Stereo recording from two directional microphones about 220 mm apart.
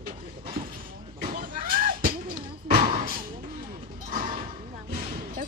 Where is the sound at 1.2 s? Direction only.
35° right (ahead or behind).